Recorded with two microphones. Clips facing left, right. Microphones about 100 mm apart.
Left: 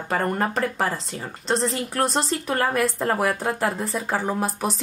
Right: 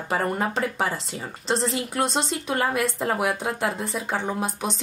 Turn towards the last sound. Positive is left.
turn(degrees=0)  # may be behind; listen again after turning